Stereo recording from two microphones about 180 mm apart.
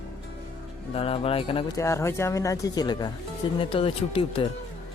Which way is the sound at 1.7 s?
15° left (ahead or behind).